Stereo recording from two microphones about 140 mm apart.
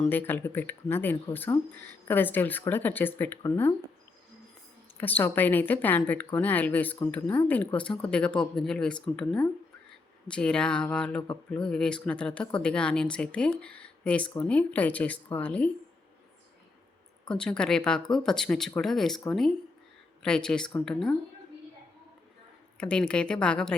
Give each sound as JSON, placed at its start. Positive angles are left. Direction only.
{"t": 0.1, "sound": "speech", "side_deg": 15}
{"t": 4.9, "sound": "speech", "side_deg": 15}
{"t": 17.2, "sound": "speech", "side_deg": 5}
{"t": 20.2, "sound": "speech", "side_deg": 5}
{"t": 22.8, "sound": "speech", "side_deg": 5}